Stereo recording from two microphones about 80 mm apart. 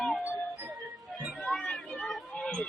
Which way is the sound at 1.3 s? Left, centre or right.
Centre.